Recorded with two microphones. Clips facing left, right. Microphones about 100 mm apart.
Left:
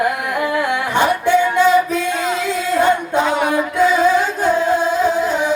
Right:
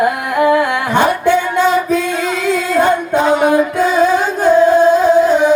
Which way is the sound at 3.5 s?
50° right (ahead or behind).